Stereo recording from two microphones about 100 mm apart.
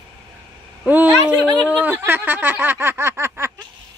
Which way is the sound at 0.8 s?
15° right (ahead or behind).